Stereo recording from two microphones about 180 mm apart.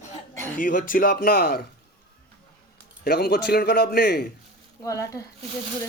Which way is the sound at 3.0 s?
60° left (ahead or behind).